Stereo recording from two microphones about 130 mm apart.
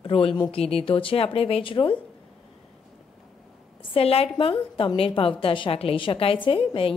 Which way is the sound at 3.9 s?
50° left (ahead or behind).